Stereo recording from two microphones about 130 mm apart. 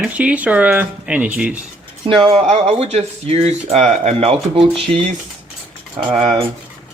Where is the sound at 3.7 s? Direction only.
65° right (ahead or behind); by 4.7 s 50° right (ahead or behind).